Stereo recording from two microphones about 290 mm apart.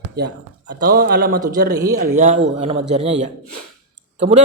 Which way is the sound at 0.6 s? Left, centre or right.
Right.